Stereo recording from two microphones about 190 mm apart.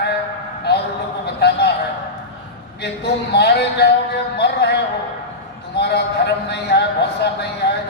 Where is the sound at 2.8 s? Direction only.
60° left (ahead or behind).